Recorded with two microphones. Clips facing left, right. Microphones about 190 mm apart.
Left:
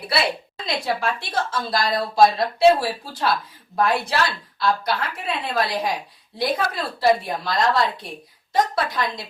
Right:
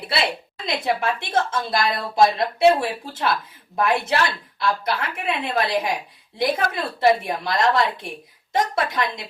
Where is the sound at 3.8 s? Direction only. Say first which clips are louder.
Right 2 dB; 20° right (ahead or behind).